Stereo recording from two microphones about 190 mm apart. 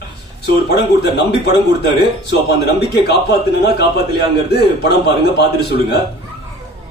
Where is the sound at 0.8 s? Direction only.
60° left (ahead or behind).